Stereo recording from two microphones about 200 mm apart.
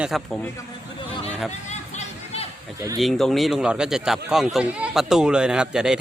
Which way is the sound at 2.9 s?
Centre (ahead or behind).